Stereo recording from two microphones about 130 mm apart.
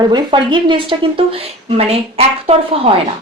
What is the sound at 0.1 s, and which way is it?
A woman's voice, 40° right (ahead or behind).